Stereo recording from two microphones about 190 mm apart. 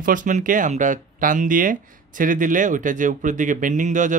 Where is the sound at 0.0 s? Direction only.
45° right (ahead or behind).